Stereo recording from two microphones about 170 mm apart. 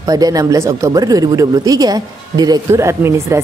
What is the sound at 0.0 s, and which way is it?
A woman's voice, 20° right (ahead or behind).